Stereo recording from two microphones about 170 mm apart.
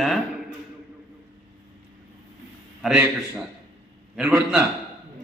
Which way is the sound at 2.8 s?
5° right (ahead or behind).